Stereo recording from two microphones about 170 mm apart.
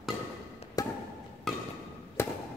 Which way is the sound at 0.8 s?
20° left (ahead or behind).